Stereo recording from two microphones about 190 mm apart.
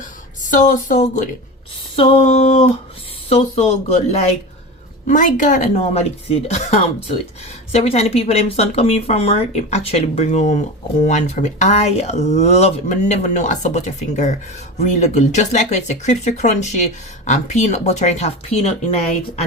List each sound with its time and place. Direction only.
0.5 s speech: 40° left (ahead or behind)